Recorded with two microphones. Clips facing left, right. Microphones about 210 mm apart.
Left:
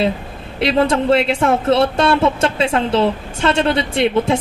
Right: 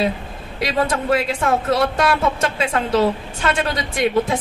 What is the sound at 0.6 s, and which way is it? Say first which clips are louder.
Speech: left 5 dB; 30° left (ahead or behind).